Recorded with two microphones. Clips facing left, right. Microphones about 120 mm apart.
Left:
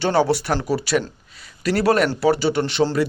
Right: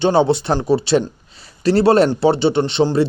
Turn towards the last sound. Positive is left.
turn(degrees=-25)  # may be behind; listen again after turning